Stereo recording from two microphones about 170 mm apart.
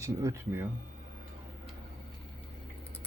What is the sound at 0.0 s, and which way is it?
Speech, 20° right (ahead or behind).